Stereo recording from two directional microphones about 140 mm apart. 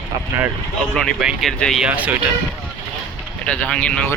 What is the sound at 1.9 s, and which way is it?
Speech, 10° right (ahead or behind).